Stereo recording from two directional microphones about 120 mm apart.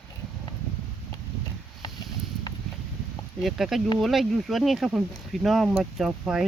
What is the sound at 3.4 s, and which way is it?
Speech, centre (ahead or behind).